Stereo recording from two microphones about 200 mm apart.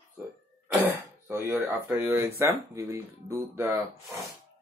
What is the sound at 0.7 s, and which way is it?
Speech, 5° right (ahead or behind).